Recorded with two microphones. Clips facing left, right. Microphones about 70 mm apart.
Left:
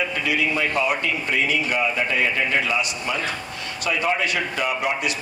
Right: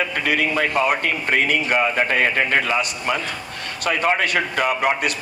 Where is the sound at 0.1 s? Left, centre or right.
Right.